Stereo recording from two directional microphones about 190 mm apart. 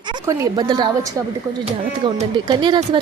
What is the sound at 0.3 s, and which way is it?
Speech, 20° right (ahead or behind).